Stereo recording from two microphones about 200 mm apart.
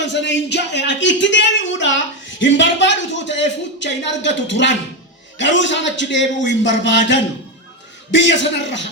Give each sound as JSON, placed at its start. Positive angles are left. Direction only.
{"t": 0.0, "sound": "speech", "side_deg": 60}